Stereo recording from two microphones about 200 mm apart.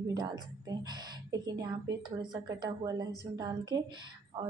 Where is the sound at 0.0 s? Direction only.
20° right (ahead or behind).